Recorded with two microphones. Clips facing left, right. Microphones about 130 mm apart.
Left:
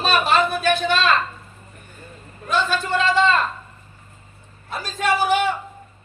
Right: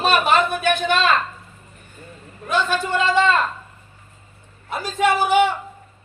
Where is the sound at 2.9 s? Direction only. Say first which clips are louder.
Even; 15° right (ahead or behind).